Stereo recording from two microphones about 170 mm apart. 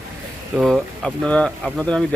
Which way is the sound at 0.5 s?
Centre (ahead or behind).